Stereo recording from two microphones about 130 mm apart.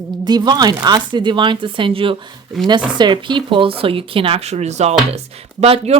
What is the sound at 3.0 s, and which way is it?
Speech, 35° right (ahead or behind).